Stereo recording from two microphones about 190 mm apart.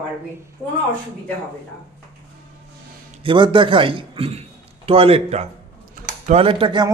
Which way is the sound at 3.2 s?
25° right (ahead or behind).